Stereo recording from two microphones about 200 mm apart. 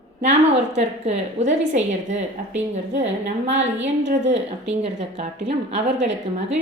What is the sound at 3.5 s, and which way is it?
A woman's voice, 35° right (ahead or behind).